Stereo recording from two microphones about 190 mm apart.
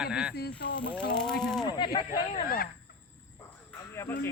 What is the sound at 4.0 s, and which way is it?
Speech, 15° left (ahead or behind).